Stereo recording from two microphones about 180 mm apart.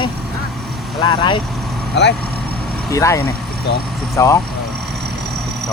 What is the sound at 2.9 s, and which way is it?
Speech, 15° left (ahead or behind).